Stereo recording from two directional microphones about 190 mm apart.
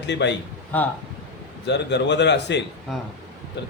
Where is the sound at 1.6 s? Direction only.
65° left (ahead or behind).